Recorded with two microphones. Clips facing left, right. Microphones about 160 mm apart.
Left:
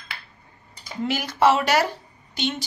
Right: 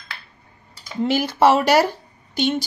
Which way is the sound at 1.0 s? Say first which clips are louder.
Right 3 dB; 30° right (ahead or behind).